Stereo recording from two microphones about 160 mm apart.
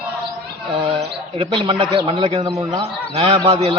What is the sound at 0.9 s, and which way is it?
A man's voice, 30° right (ahead or behind).